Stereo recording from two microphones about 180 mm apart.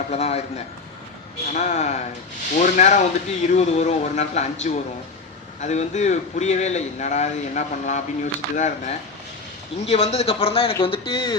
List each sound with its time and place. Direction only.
0.1 s a man's voice: 35° left (ahead or behind)